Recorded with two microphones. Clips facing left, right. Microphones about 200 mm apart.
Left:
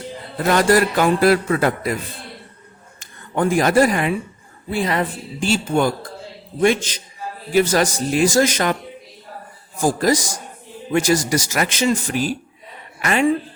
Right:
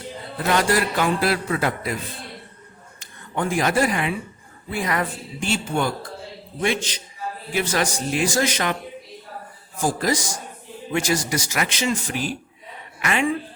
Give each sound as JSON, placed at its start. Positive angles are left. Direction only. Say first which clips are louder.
{"t": 0.5, "sound": "a man's voice", "louder": "left 5 dB", "side_deg": 45}
{"t": 3.0, "sound": "speech", "louder": "left 6 dB", "side_deg": 45}
{"t": 4.7, "sound": "a man's voice", "louder": "left 4 dB", "side_deg": 30}
{"t": 9.8, "sound": "a man's voice", "louder": "left 5 dB", "side_deg": 40}